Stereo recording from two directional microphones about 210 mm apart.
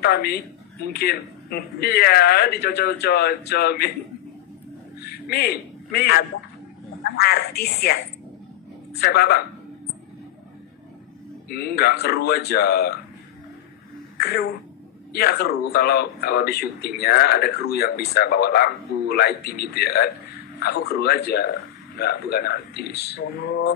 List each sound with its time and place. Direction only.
0.0 s speech: 50° left (ahead or behind)
5.0 s a sound: 50° left (ahead or behind)
7.0 s speech: 50° left (ahead or behind)
9.0 s speech: 50° left (ahead or behind)
11.4 s speech: 50° left (ahead or behind)
14.1 s a man's voice: 50° left (ahead or behind)